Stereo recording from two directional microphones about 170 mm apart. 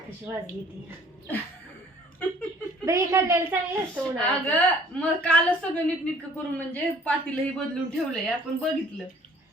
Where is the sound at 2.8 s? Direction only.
15° right (ahead or behind).